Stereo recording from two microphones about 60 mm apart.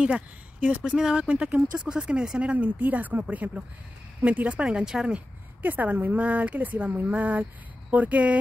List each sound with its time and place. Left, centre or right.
0.0 s speech: centre
4.6 s speech: centre
5.1 s speech: right